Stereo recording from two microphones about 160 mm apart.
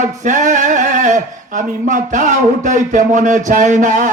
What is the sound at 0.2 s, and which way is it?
Speech, 50° right (ahead or behind).